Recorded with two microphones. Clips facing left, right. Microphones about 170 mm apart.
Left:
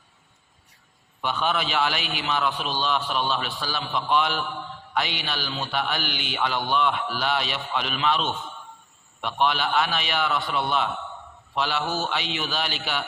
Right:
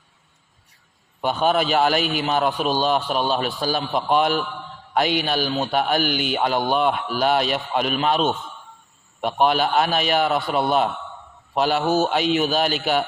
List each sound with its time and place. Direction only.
1.2 s a man's voice: 45° right (ahead or behind)